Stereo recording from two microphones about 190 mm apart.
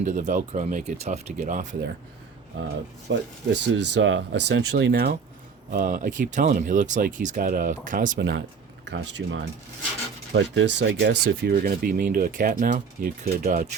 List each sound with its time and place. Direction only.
0.0 s speech: 40° right (ahead or behind)
3.1 s speech: 65° right (ahead or behind)
5.7 s speech: 45° right (ahead or behind)
8.2 s speech: 65° right (ahead or behind)
11.0 s speech: 55° right (ahead or behind)